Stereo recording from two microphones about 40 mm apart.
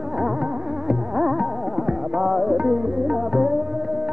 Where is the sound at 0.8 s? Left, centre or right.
Centre.